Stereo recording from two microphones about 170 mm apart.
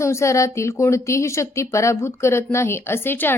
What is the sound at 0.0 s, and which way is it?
A woman's voice, 15° left (ahead or behind).